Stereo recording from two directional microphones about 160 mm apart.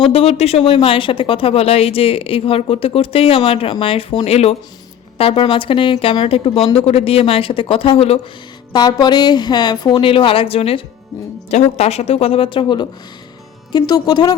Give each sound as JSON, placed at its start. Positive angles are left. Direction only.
{"t": 0.1, "sound": "speech", "side_deg": 40}
{"t": 8.7, "sound": "a woman's voice", "side_deg": 25}